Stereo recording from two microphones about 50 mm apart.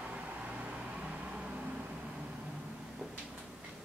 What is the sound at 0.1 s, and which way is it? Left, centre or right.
Vehicle, right.